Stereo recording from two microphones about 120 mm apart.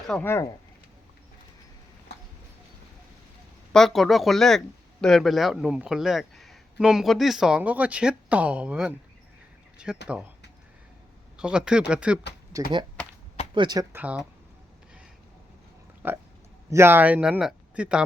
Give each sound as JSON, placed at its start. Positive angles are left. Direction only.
{"t": 0.2, "sound": "speech", "side_deg": 20}
{"t": 3.7, "sound": "speech", "side_deg": 5}
{"t": 11.3, "sound": "speech", "side_deg": -5}
{"t": 13.5, "sound": "speech", "side_deg": -40}
{"t": 13.9, "sound": "speech", "side_deg": -10}
{"t": 16.0, "sound": "speech", "side_deg": -20}